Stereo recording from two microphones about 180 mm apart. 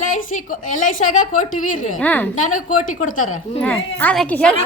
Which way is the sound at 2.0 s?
10° left (ahead or behind).